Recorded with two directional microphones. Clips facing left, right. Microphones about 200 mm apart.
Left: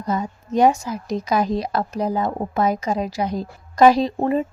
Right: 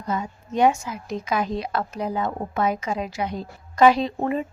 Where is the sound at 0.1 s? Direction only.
40° left (ahead or behind).